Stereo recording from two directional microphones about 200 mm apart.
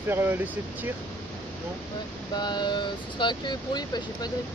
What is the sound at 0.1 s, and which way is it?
Speech, 10° right (ahead or behind).